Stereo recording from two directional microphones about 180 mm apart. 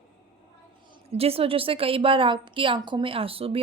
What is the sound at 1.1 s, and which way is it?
A woman's voice, 35° right (ahead or behind).